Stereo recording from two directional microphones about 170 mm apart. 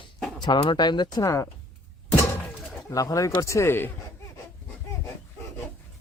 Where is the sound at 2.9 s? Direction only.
20° left (ahead or behind).